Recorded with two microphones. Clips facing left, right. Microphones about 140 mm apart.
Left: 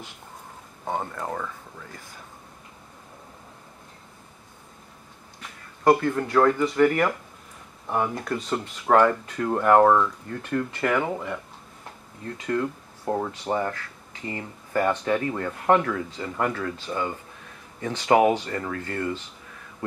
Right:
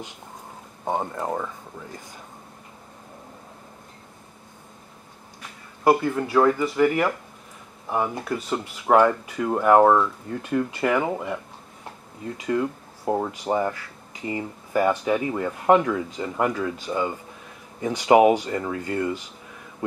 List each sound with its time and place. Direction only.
0.8 s speech: 20° right (ahead or behind)
5.9 s speech: 10° right (ahead or behind)